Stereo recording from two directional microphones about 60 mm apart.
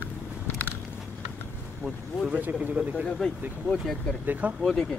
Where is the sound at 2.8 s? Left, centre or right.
Right.